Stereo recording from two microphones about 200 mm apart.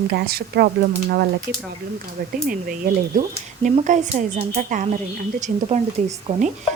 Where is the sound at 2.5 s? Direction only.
45° right (ahead or behind).